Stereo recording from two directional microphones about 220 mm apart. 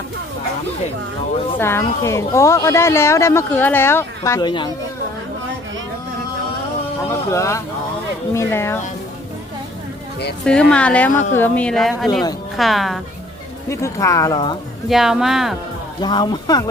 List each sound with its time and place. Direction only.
1.5 s a woman's voice: 10° left (ahead or behind)
7.3 s a woman's voice: 15° left (ahead or behind)
10.4 s a woman's voice: 5° left (ahead or behind)
13.7 s a woman's voice: 15° left (ahead or behind)
14.8 s a woman's voice: centre (ahead or behind)
16.0 s speech: 20° left (ahead or behind)